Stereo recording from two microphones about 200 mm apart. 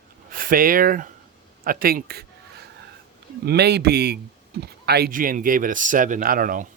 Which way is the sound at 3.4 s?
55° right (ahead or behind).